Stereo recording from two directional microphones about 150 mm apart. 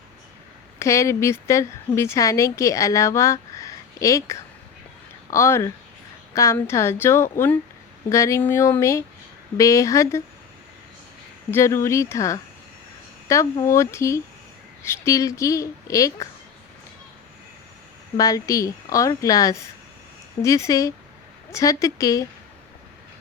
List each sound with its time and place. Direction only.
0.8 s a woman's voice: 20° left (ahead or behind)
11.5 s speech: 20° left (ahead or behind)
18.2 s speech: 25° left (ahead or behind)